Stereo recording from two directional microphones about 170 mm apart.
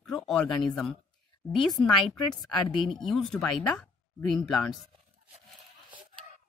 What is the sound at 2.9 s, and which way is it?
A woman's voice, centre (ahead or behind).